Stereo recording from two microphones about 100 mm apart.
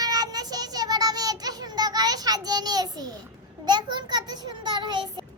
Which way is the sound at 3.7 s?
45° right (ahead or behind).